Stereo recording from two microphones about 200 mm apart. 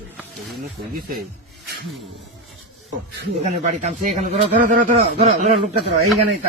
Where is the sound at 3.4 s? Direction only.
35° right (ahead or behind).